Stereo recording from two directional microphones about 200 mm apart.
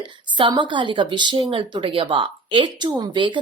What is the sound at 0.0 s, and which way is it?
A woman's voice, 25° right (ahead or behind).